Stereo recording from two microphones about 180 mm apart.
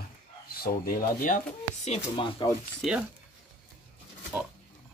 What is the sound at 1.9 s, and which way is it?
Speech, 30° left (ahead or behind).